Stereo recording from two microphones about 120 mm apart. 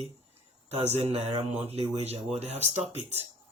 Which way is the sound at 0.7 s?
60° right (ahead or behind).